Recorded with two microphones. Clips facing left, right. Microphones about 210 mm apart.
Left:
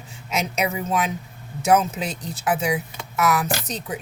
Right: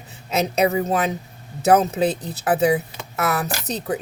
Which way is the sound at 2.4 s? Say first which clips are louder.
Right 5 dB; 35° right (ahead or behind).